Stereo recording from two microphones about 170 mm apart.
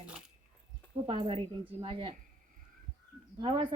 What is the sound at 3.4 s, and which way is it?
Speech, 30° right (ahead or behind).